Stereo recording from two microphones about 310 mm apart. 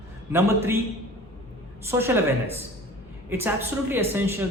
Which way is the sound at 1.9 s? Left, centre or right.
Centre.